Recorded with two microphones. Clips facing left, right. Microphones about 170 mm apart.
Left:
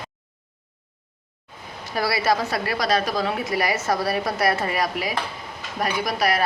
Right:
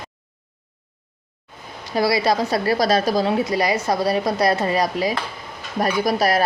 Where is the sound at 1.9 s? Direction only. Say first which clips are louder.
Right 5 dB; 20° right (ahead or behind).